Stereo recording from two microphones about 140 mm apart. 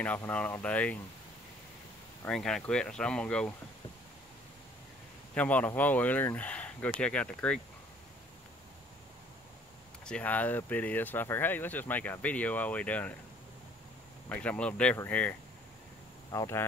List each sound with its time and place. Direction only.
0.0 s speech: 10° left (ahead or behind)
2.2 s speech: 5° left (ahead or behind)
5.3 s speech: 10° left (ahead or behind)
10.0 s speech: 10° left (ahead or behind)
14.3 s speech: 10° left (ahead or behind)
16.3 s speech: 20° left (ahead or behind)